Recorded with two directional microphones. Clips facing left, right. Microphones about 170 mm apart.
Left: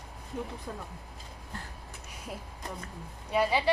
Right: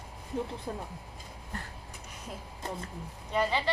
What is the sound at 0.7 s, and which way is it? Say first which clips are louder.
Speech: right 3 dB; 25° right (ahead or behind).